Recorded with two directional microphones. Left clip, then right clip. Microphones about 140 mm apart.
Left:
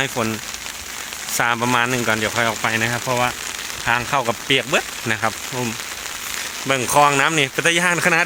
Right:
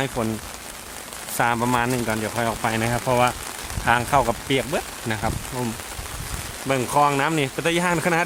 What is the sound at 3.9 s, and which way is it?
Speech, 35° right (ahead or behind).